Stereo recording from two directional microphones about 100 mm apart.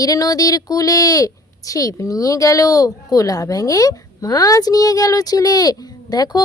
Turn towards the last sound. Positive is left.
turn(degrees=40)  # may be behind; listen again after turning